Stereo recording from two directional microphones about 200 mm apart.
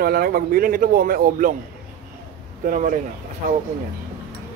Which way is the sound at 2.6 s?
40° right (ahead or behind).